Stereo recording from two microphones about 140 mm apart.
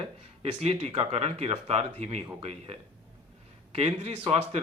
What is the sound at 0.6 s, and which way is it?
Speech, 50° right (ahead or behind).